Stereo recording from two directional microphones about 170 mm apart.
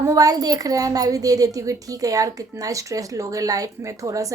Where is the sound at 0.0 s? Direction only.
20° right (ahead or behind).